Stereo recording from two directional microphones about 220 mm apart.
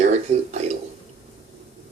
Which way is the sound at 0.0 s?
30° right (ahead or behind).